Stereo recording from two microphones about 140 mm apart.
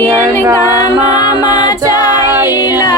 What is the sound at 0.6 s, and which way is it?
A capella, 30° left (ahead or behind).